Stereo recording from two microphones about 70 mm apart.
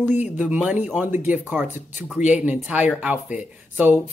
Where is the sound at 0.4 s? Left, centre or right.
Centre.